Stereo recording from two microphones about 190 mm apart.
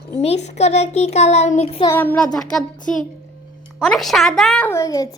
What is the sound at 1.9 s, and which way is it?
Speech, 10° left (ahead or behind).